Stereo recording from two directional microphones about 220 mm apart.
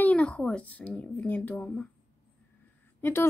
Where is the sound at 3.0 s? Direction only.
10° left (ahead or behind).